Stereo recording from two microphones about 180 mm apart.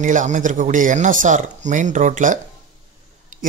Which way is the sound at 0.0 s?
45° right (ahead or behind).